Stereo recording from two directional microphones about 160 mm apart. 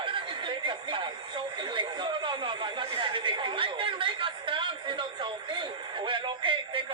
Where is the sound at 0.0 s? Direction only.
30° right (ahead or behind).